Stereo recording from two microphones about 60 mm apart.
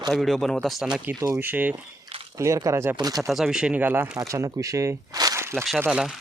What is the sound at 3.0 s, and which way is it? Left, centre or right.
Speech, right.